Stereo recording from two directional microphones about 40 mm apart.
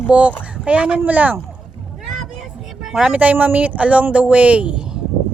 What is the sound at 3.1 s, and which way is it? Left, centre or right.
Speech, right.